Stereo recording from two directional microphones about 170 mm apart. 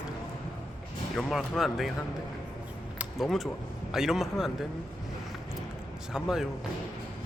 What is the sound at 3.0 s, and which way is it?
A man's voice, centre (ahead or behind).